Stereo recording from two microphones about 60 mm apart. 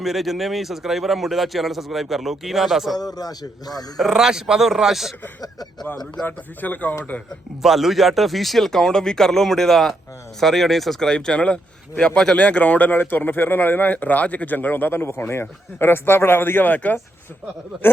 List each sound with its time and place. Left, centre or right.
0.0 s a man's voice: centre
3.2 s a man's voice: left
3.9 s a man's voice: centre
6.2 s speech: left
7.6 s a man's voice: centre
11.1 s speech: centre; by 17.0 s left